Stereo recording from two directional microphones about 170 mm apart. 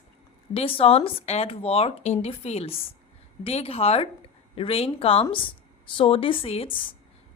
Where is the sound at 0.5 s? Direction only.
35° left (ahead or behind).